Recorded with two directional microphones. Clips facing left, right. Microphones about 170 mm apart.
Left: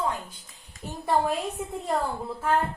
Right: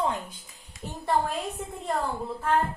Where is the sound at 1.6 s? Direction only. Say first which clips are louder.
Left 3 dB; 10° left (ahead or behind).